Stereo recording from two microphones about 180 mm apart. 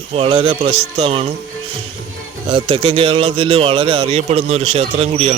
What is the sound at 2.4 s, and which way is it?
A man's voice, 30° right (ahead or behind).